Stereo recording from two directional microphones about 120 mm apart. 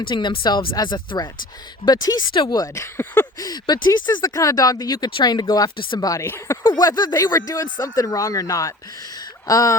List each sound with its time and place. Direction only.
0.1 s speech: 40° left (ahead or behind); by 3.2 s 20° left (ahead or behind)
3.3 s speech: 35° left (ahead or behind)
6.1 s speech: 20° left (ahead or behind)
6.6 s speech: 35° left (ahead or behind)
9.1 s a sound: 30° left (ahead or behind)